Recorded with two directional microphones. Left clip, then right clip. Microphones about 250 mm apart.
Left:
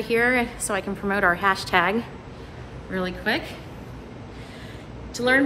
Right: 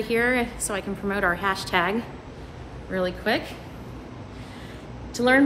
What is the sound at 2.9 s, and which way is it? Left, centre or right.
Speech, centre.